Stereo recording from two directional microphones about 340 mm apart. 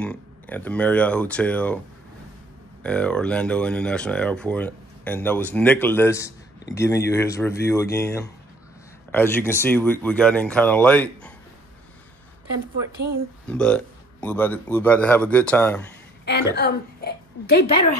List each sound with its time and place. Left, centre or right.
0.0 s speech: centre
2.8 s speech: centre
13.5 s speech: centre
16.3 s a woman's voice: left